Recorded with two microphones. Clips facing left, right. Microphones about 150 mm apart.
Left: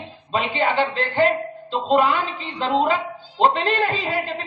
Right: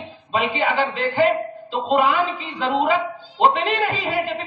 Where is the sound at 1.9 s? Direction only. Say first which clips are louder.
Even; 40° left (ahead or behind).